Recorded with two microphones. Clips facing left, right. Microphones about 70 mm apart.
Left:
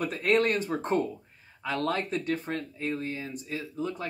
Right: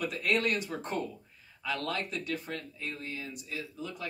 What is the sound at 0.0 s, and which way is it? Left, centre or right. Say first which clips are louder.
Speech: left 5 dB; left.